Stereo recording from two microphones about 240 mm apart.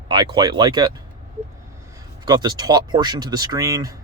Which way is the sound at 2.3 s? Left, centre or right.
Centre.